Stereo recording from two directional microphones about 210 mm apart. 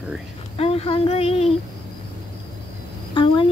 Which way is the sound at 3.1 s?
25° left (ahead or behind).